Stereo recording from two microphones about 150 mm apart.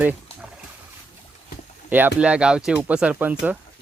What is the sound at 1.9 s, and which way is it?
Speech, 10° right (ahead or behind).